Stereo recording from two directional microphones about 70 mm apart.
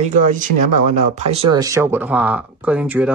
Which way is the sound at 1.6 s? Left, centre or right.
Right.